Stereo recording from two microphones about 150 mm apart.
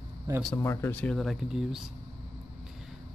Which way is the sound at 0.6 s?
15° left (ahead or behind).